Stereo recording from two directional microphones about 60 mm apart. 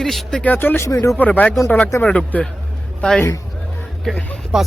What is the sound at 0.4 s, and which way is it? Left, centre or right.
Speech, left.